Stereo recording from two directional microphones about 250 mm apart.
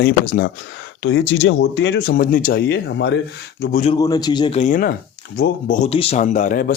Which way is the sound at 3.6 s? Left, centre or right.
Left.